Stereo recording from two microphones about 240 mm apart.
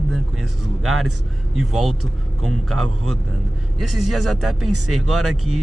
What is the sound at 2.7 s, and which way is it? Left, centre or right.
Speech, right.